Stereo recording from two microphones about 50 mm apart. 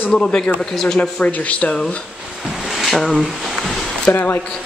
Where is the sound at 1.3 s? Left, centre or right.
Left.